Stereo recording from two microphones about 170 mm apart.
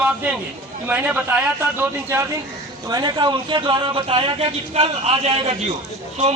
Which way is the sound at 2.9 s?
25° right (ahead or behind).